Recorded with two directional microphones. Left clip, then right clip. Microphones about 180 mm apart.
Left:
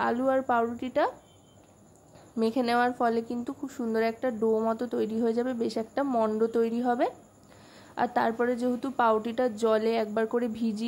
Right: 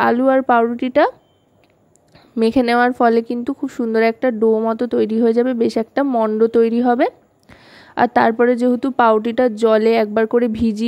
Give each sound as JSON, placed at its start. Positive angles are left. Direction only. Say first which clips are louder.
{"t": 0.0, "sound": "speech", "louder": "right 12 dB", "side_deg": -40}
{"t": 2.3, "sound": "speech", "louder": "right 11 dB", "side_deg": -40}